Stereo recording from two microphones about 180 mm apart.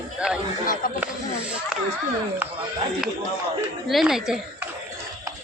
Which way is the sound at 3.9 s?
Centre (ahead or behind).